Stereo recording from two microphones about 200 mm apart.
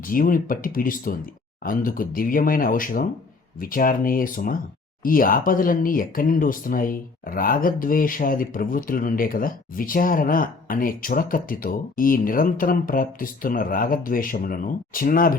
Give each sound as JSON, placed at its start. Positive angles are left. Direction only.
{"t": 0.0, "sound": "speech", "side_deg": 45}